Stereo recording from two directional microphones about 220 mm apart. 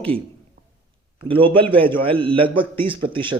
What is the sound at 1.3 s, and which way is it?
A man's voice, 25° right (ahead or behind).